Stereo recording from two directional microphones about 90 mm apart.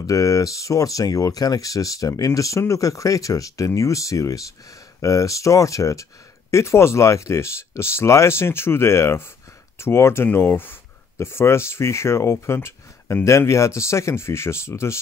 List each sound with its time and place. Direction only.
0.0 s speech: 35° left (ahead or behind)